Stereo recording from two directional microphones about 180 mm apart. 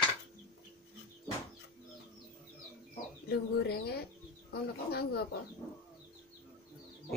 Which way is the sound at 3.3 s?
60° left (ahead or behind).